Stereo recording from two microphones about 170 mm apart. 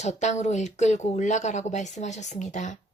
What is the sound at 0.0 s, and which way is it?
Speech, 40° left (ahead or behind).